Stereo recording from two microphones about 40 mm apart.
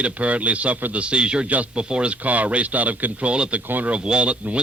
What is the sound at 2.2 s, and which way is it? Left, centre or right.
A man's voice, right.